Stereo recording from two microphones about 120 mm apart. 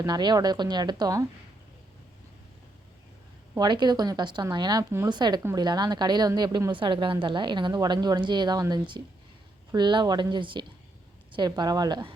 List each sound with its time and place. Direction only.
0.0 s a woman's voice: 35° right (ahead or behind)
3.6 s a woman's voice: 40° right (ahead or behind)
5.1 s a woman's voice: 40° right (ahead or behind)